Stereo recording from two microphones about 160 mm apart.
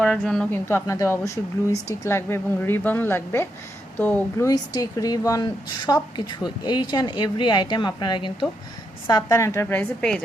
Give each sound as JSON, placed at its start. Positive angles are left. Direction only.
{"t": 0.0, "sound": "a woman's voice", "side_deg": 5}
{"t": 0.7, "sound": "a woman's voice", "side_deg": 15}
{"t": 4.4, "sound": "a woman's voice", "side_deg": 25}